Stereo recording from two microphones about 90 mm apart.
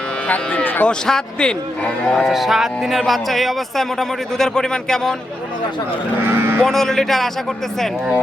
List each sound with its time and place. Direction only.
0.3 s speech: 20° left (ahead or behind)
0.9 s a man's voice: 10° left (ahead or behind)
6.2 s speech: 25° right (ahead or behind)
6.7 s a man's voice: 5° left (ahead or behind)